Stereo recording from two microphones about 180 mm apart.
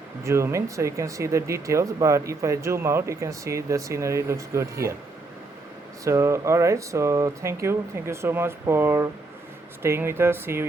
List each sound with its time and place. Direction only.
0.3 s speech: 15° right (ahead or behind)
6.1 s speech: 15° right (ahead or behind)